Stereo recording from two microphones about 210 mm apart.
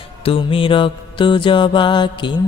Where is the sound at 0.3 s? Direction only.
25° left (ahead or behind).